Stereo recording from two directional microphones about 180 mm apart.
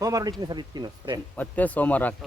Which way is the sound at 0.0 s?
20° right (ahead or behind).